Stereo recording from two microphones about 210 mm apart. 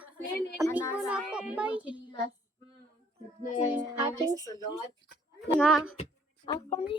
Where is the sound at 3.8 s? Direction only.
20° right (ahead or behind).